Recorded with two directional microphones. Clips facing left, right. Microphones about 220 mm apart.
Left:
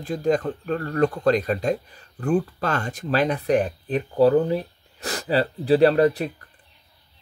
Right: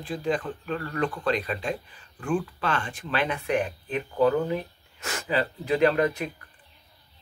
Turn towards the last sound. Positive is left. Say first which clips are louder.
# left 5 dB
turn(degrees=35)  # may be behind; listen again after turning